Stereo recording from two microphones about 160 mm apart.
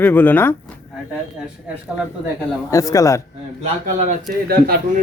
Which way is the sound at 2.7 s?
20° left (ahead or behind).